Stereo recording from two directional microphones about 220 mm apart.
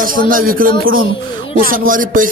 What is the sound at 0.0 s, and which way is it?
A woman's voice, 40° right (ahead or behind).